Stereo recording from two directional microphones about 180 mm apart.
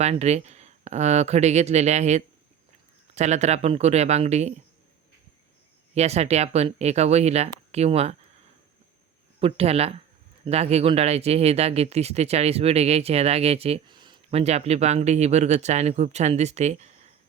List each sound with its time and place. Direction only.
0.0 s speech: 40° right (ahead or behind)
5.9 s speech: 35° right (ahead or behind)
9.4 s speech: 35° right (ahead or behind)